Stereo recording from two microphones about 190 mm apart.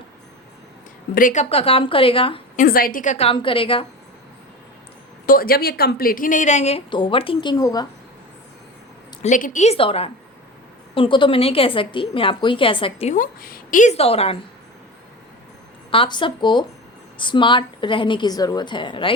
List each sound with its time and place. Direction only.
1.1 s a woman's voice: 45° left (ahead or behind)
2.6 s a woman's voice: 50° left (ahead or behind); by 3.8 s 30° left (ahead or behind)
5.2 s a woman's voice: 50° left (ahead or behind); by 7.9 s 20° left (ahead or behind)
9.2 s a woman's voice: 40° left (ahead or behind)
13.1 s a woman's voice: 50° left (ahead or behind); by 14.3 s 30° left (ahead or behind)
15.9 s a woman's voice: 25° left (ahead or behind)